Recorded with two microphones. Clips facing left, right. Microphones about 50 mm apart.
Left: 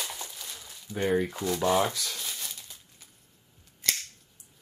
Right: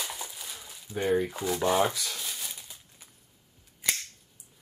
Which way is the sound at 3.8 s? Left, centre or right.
Centre.